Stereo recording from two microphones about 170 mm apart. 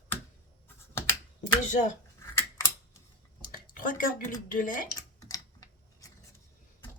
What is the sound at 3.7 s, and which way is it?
Speech, 55° left (ahead or behind).